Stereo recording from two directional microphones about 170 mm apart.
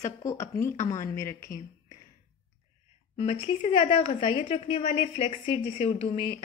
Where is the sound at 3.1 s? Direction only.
35° left (ahead or behind).